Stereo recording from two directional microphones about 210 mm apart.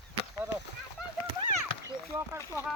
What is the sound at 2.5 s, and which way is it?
Speech, 15° left (ahead or behind).